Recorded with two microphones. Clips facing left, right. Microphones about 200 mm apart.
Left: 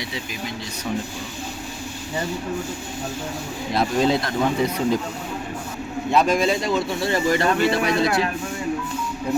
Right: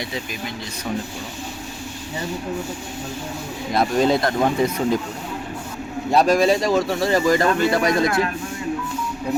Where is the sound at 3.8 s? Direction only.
50° right (ahead or behind).